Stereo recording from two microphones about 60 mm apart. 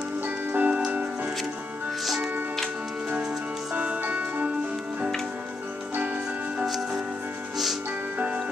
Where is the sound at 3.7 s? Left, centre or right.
Right.